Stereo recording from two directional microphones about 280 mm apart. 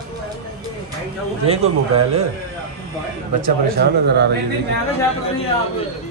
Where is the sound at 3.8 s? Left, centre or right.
Right.